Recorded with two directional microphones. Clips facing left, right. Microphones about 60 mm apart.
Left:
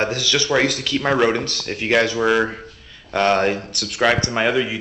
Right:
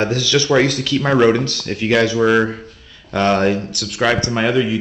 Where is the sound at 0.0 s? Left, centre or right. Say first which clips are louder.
Right 4 dB; left.